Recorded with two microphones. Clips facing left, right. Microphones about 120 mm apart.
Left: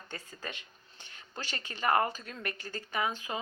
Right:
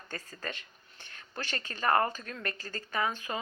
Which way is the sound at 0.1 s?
20° left (ahead or behind).